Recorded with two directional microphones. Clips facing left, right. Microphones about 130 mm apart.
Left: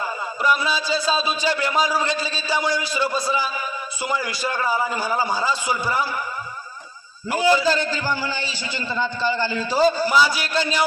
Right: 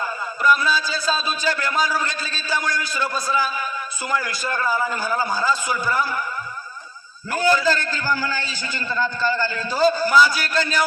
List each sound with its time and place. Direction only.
0.4 s a man's voice: 25° left (ahead or behind)
7.3 s a man's voice: 25° left (ahead or behind)